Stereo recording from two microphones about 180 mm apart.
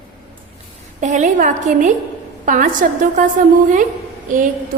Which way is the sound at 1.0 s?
40° right (ahead or behind).